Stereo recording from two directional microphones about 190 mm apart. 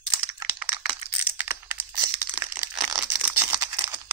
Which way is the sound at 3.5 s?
20° right (ahead or behind).